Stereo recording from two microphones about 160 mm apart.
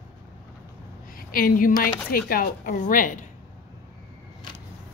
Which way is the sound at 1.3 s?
60° left (ahead or behind).